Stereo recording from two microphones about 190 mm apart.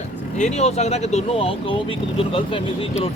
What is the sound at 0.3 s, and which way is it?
Speech, 35° left (ahead or behind).